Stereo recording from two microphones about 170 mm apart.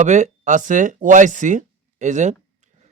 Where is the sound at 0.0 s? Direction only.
45° right (ahead or behind).